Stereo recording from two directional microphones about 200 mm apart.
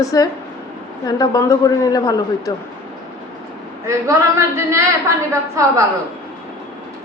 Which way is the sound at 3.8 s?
15° right (ahead or behind).